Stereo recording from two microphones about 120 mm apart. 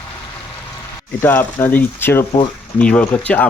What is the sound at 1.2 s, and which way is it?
Speech, 15° left (ahead or behind).